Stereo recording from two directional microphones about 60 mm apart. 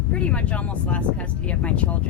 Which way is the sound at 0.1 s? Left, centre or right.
Left.